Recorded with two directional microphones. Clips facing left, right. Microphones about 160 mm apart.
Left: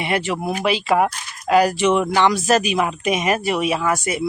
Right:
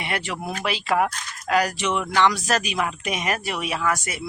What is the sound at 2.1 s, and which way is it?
Speech, 15° left (ahead or behind).